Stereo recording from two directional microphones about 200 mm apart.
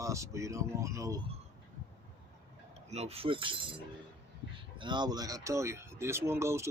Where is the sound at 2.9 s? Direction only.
30° right (ahead or behind).